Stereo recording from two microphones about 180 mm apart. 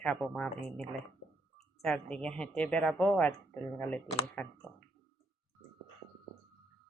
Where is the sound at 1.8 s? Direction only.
5° left (ahead or behind).